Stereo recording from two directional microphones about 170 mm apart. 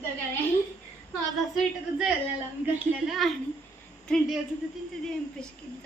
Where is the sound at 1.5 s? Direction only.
5° right (ahead or behind).